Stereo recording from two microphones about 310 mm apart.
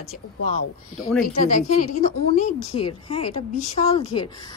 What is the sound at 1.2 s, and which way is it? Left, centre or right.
A woman's voice, left.